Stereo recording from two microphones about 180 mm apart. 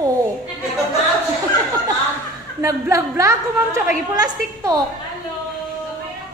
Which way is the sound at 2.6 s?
15° right (ahead or behind).